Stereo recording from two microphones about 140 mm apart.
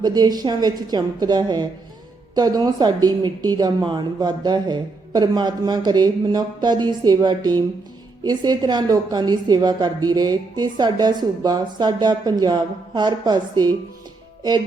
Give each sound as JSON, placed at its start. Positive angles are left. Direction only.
{"t": 0.0, "sound": "a woman's voice", "side_deg": -30}